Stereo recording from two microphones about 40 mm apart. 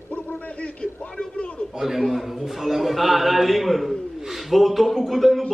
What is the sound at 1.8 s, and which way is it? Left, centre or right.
A man's voice, centre.